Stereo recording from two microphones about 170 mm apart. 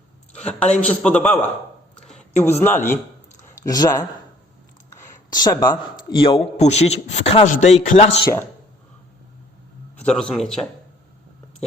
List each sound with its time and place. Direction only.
0.3 s a man's voice: 5° left (ahead or behind)
2.0 s a sound: 10° left (ahead or behind)
5.3 s a man's voice: 20° left (ahead or behind); by 8.3 s 35° left (ahead or behind)
10.0 s a man's voice: 5° left (ahead or behind)